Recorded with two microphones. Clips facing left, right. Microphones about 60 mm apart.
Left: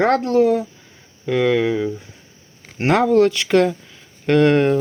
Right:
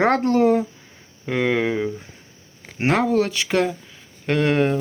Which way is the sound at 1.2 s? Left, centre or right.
Right.